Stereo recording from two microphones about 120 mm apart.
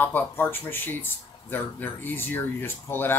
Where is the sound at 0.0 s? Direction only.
15° left (ahead or behind).